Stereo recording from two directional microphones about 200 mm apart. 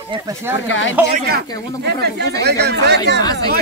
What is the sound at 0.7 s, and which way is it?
Speech, 70° left (ahead or behind).